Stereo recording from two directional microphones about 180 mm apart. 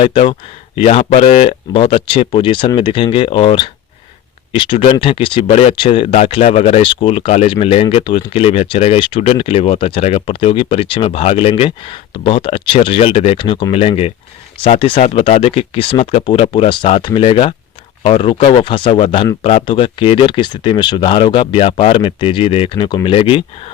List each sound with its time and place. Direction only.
0.0 s speech: 30° left (ahead or behind)